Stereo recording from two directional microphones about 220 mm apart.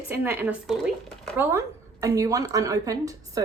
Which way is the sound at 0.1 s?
10° right (ahead or behind).